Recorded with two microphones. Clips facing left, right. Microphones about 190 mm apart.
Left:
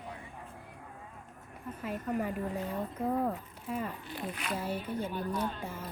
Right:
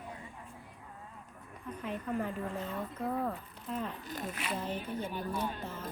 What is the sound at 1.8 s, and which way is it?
Speech, 5° left (ahead or behind).